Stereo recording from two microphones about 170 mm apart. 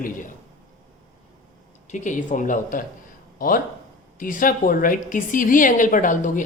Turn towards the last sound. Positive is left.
turn(degrees=50)  # may be behind; listen again after turning